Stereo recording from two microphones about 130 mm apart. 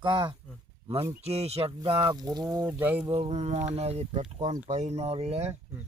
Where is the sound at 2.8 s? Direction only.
15° right (ahead or behind).